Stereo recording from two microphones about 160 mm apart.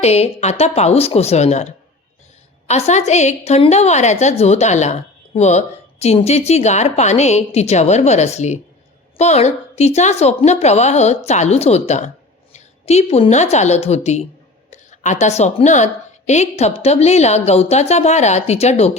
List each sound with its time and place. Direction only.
0.0 s a woman's voice: 40° left (ahead or behind)